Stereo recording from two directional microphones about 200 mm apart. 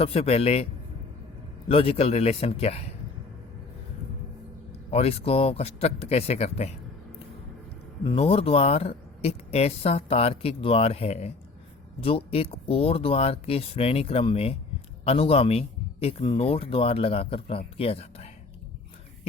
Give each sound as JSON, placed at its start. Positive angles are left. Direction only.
{"t": 0.0, "sound": "speech", "side_deg": 30}
{"t": 4.9, "sound": "speech", "side_deg": 30}
{"t": 8.0, "sound": "a man's voice", "side_deg": 30}